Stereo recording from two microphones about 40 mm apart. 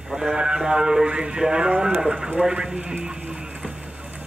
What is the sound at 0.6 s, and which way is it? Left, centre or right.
Speech, centre.